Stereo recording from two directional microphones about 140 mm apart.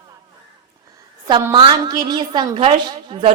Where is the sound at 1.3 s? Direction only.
35° right (ahead or behind).